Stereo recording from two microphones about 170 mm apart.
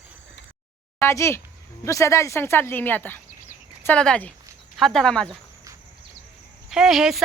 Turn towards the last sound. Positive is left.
turn(degrees=-5)  # may be behind; listen again after turning